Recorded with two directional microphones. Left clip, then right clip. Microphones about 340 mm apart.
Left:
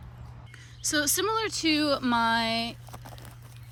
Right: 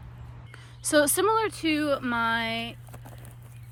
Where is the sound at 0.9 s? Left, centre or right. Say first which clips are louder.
Right 5 dB; centre.